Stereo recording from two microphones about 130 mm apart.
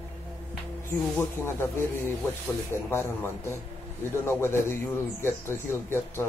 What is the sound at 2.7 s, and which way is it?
Speech, 20° left (ahead or behind).